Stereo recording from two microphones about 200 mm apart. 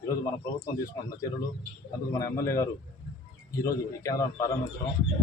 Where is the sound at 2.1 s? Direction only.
15° left (ahead or behind).